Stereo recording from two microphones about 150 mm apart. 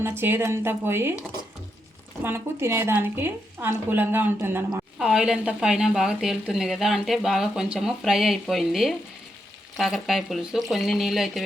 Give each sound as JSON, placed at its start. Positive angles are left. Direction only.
{"t": 0.2, "sound": "a woman's voice", "side_deg": -15}
{"t": 2.2, "sound": "a woman's voice", "side_deg": -15}
{"t": 4.9, "sound": "a woman's voice", "side_deg": -5}